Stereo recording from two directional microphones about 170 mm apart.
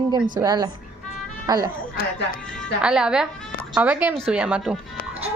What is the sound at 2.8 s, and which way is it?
A child's voice, 5° right (ahead or behind).